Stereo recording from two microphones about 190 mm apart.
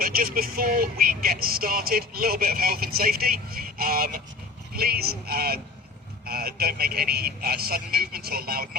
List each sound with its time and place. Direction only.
0.0 s speech: 50° right (ahead or behind)